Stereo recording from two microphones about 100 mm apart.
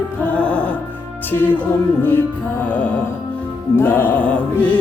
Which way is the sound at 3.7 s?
20° left (ahead or behind).